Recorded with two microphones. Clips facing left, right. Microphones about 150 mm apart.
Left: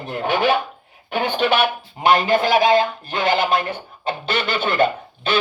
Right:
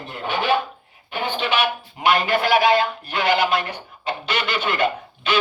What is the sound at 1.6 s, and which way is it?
Speech, 25° left (ahead or behind).